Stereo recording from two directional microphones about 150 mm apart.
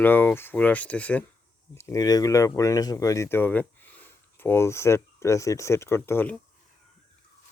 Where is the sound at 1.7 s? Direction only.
20° left (ahead or behind).